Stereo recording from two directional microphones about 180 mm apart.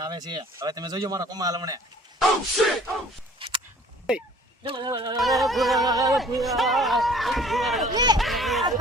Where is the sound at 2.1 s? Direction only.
Centre (ahead or behind).